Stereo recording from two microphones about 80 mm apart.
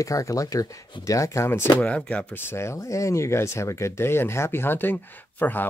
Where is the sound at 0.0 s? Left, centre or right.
Left.